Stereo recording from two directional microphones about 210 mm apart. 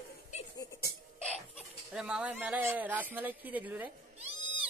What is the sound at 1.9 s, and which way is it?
Speech, 5° right (ahead or behind).